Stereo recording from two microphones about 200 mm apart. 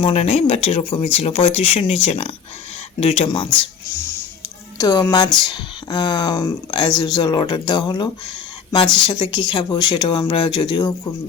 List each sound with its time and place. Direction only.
0.0 s speech: 30° left (ahead or behind)
4.8 s speech: 15° left (ahead or behind)